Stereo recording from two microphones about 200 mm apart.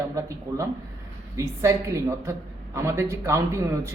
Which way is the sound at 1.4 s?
15° right (ahead or behind).